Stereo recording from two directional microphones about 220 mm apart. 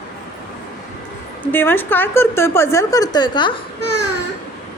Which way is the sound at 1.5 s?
10° left (ahead or behind).